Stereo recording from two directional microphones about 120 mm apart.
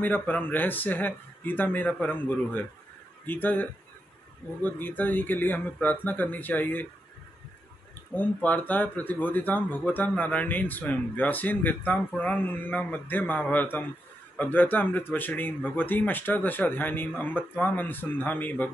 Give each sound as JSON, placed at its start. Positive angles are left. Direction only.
{"t": 0.0, "sound": "a man's voice", "side_deg": 15}
{"t": 8.1, "sound": "a man's voice", "side_deg": 10}